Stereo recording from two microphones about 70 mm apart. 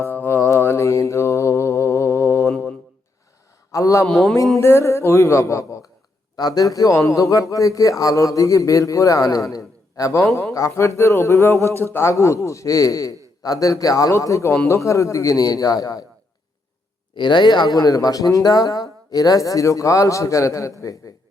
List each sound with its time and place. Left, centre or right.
0.1 s mantra: left
3.7 s a man's voice: left
6.3 s a man's voice: left
12.1 s a man's voice: left
17.2 s speech: left